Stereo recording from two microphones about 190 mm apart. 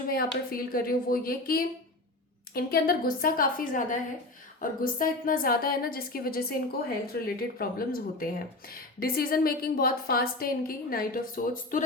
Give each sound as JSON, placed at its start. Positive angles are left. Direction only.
{"t": 0.1, "sound": "speech", "side_deg": 50}